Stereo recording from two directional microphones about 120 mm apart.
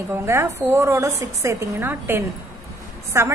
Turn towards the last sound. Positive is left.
turn(degrees=-20)  # may be behind; listen again after turning